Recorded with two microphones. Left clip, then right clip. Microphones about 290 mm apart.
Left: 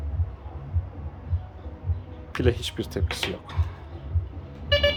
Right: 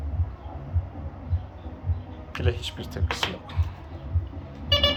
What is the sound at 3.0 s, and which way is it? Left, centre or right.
Speech, left.